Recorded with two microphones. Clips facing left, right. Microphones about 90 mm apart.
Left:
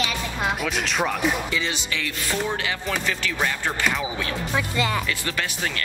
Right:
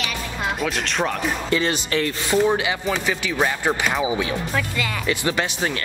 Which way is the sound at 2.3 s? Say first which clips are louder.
Right 7 dB; 20° right (ahead or behind).